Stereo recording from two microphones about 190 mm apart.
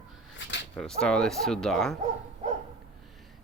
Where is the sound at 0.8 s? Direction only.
5° left (ahead or behind).